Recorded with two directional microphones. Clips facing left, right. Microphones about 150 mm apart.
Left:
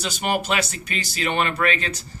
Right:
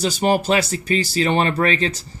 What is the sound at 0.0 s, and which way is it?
Speech, 35° right (ahead or behind).